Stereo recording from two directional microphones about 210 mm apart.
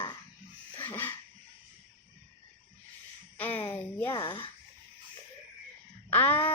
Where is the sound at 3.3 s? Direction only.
10° left (ahead or behind).